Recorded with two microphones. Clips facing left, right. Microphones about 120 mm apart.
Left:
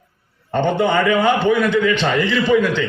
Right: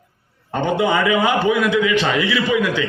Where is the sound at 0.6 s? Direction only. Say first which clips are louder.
Left 1 dB; 10° right (ahead or behind).